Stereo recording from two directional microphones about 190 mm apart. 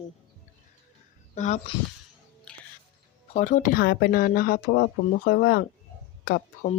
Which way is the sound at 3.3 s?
40° left (ahead or behind).